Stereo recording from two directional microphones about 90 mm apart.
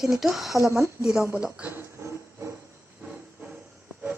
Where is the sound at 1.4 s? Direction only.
10° right (ahead or behind).